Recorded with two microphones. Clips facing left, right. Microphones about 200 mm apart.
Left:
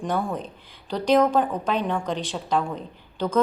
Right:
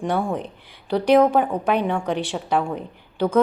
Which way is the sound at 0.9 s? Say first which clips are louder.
Right 4 dB; 10° right (ahead or behind).